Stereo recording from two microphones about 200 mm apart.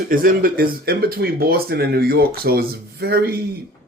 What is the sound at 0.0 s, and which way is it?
Speech, 45° right (ahead or behind).